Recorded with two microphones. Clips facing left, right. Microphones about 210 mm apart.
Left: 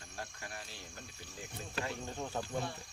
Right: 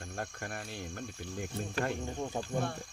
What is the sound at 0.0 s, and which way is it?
Speech, 55° right (ahead or behind).